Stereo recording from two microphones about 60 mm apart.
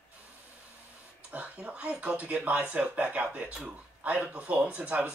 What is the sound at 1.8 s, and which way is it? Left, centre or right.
Speech, right.